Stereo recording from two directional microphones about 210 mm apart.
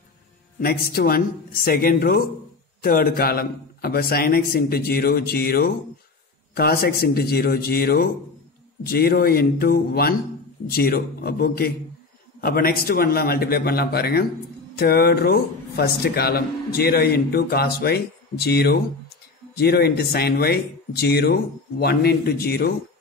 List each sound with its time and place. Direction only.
0.6 s speech: 50° left (ahead or behind)